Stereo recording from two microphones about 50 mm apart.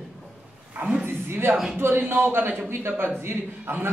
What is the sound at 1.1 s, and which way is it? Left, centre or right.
A man's voice, right.